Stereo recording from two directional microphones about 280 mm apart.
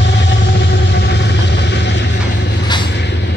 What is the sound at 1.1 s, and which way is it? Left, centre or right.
Vehicle, left.